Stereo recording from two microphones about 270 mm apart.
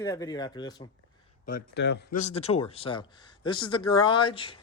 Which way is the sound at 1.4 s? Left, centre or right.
Left.